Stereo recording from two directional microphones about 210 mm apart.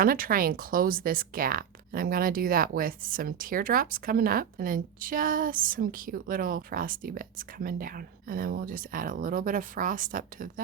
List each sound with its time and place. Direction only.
0.0 s speech: 45° right (ahead or behind)